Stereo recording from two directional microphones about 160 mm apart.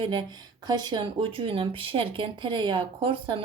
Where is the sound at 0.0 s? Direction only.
30° right (ahead or behind).